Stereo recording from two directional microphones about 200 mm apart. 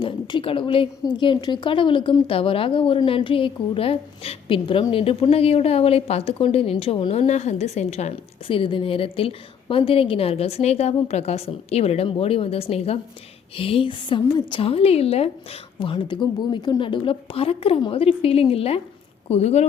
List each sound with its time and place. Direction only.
0.0 s a woman's voice: 25° left (ahead or behind)